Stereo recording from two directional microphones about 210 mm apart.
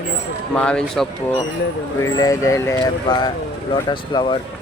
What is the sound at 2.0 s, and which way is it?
Speech, 15° left (ahead or behind).